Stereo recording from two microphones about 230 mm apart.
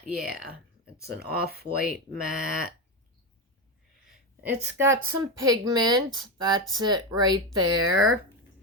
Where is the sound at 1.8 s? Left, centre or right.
Centre.